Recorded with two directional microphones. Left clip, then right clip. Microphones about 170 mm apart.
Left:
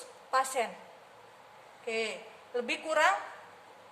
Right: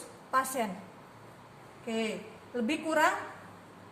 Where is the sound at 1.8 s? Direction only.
35° left (ahead or behind).